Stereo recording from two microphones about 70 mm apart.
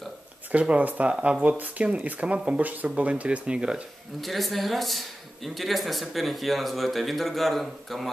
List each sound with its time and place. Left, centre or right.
0.5 s speech: centre
4.2 s a man's voice: centre